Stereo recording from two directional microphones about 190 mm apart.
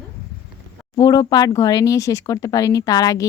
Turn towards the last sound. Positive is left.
turn(degrees=20)  # may be behind; listen again after turning